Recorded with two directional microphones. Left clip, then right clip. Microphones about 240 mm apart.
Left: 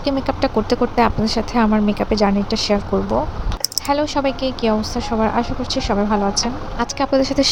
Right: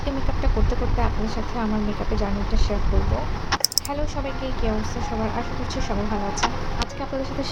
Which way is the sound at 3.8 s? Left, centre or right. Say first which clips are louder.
Left 11 dB; left.